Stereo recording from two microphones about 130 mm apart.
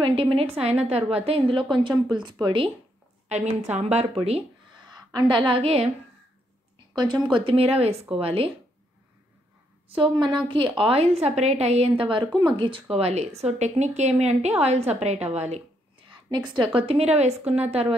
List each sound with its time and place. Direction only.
0.0 s a woman's voice: 45° right (ahead or behind)
3.3 s a woman's voice: 60° right (ahead or behind)
4.9 s a woman's voice: 35° right (ahead or behind)
5.6 s a woman's voice: 55° right (ahead or behind)
7.0 s a woman's voice: 35° right (ahead or behind)
9.8 s a woman's voice: 45° right (ahead or behind)
10.8 s a woman's voice: 50° right (ahead or behind)
12.9 s speech: 55° right (ahead or behind)
16.1 s a woman's voice: 35° right (ahead or behind); by 17.9 s 55° right (ahead or behind)